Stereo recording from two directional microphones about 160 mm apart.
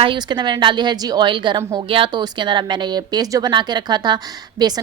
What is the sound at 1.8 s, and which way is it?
A woman's voice, 30° right (ahead or behind).